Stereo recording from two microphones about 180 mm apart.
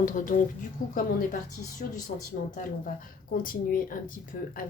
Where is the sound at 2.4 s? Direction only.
45° left (ahead or behind).